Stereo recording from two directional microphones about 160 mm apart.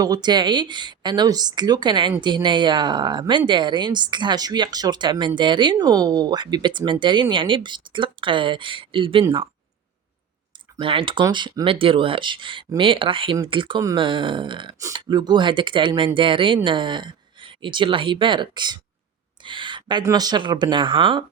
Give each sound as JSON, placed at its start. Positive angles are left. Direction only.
{"t": 0.0, "sound": "a woman's voice", "side_deg": -25}
{"t": 10.8, "sound": "a woman's voice", "side_deg": -35}